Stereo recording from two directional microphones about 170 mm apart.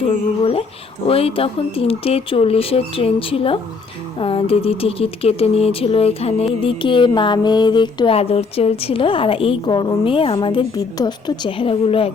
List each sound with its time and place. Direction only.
0.0 s speech: 35° left (ahead or behind)